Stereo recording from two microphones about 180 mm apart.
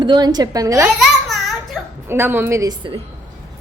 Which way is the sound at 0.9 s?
Centre (ahead or behind).